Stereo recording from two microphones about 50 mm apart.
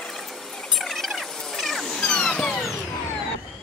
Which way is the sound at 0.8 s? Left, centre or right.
Centre.